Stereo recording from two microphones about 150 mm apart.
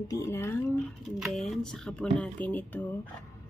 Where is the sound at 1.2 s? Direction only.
Centre (ahead or behind).